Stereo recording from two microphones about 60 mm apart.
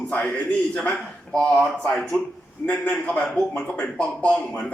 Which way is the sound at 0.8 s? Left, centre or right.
Centre.